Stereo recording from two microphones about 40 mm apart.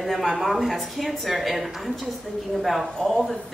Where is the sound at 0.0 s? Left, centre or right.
Centre.